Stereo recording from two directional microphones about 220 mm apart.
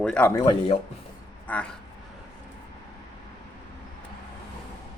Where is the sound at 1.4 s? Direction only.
5° left (ahead or behind).